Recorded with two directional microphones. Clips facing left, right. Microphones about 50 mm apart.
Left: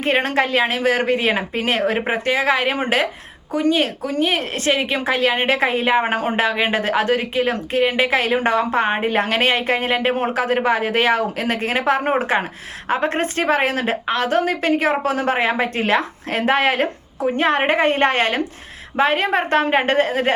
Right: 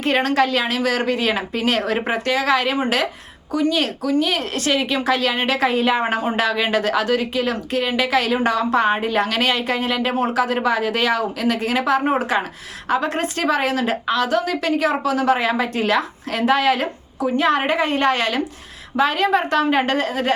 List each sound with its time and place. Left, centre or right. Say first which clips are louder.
0.0 s a woman's voice: right 1 dB; left